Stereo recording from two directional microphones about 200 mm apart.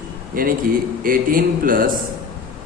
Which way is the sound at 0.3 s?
45° right (ahead or behind).